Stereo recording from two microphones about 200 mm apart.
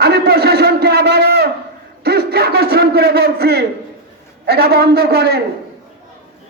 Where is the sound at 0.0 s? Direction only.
50° right (ahead or behind).